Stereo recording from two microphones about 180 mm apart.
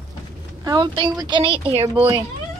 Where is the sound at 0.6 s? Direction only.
25° right (ahead or behind).